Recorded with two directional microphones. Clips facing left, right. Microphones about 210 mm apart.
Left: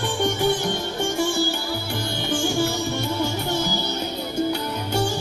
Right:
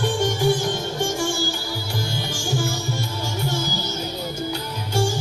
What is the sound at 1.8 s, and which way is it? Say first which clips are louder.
Music: left 2 dB; 60° left (ahead or behind).